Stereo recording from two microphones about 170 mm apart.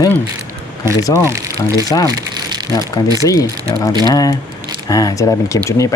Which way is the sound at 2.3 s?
25° right (ahead or behind).